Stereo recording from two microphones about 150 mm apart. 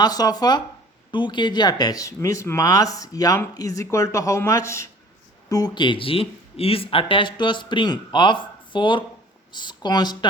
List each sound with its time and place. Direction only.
0.0 s speech: 25° left (ahead or behind)